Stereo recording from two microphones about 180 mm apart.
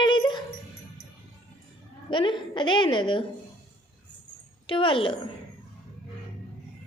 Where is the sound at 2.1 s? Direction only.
25° left (ahead or behind).